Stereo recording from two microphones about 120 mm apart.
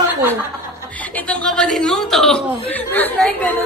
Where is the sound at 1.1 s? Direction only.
10° left (ahead or behind).